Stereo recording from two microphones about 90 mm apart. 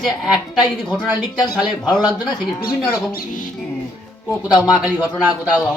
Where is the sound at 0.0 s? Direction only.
Centre (ahead or behind).